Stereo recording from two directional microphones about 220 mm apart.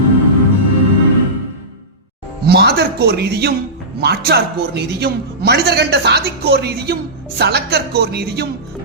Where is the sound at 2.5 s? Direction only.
50° right (ahead or behind).